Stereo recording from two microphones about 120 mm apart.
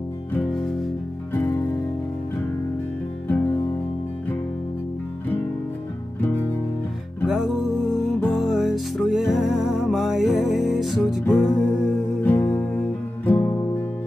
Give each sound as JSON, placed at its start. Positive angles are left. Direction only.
{"t": 1.3, "sound": "music", "side_deg": 15}
{"t": 3.3, "sound": "music", "side_deg": 15}
{"t": 7.2, "sound": "music", "side_deg": 0}